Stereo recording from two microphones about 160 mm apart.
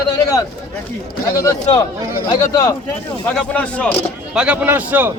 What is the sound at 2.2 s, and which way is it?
Speech, 30° left (ahead or behind).